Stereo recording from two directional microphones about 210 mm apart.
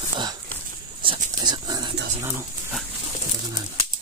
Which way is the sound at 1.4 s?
20° right (ahead or behind).